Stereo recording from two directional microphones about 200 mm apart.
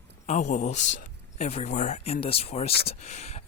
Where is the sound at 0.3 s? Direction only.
35° left (ahead or behind).